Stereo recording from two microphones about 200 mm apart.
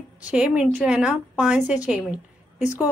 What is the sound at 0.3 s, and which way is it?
A woman's voice, 5° right (ahead or behind).